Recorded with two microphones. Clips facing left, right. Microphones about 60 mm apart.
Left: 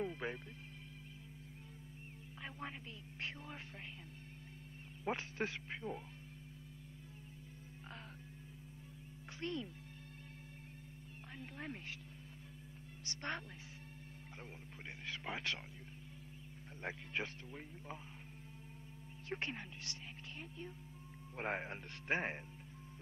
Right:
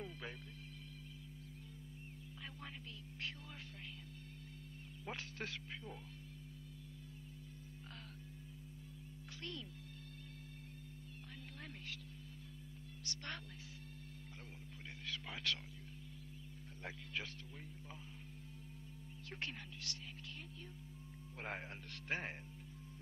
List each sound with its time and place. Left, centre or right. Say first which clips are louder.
0.0 s speech: left 8 dB; left
2.4 s speech: left 5 dB; left
5.0 s speech: left 7 dB; left
9.3 s speech: left 7 dB; left
11.2 s speech: left 8 dB; left
13.0 s a woman's voice: left 5 dB; left
14.3 s a sound: left 2 dB; left
16.8 s speech: left 4 dB; left
19.2 s speech: left 5 dB; left